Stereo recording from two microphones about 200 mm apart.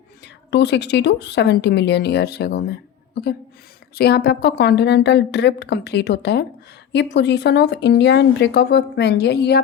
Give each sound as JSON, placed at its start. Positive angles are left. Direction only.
{"t": 0.2, "sound": "speech", "side_deg": 60}
{"t": 3.9, "sound": "speech", "side_deg": 55}